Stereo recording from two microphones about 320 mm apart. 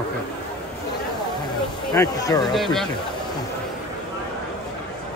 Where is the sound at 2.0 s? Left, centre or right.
Centre.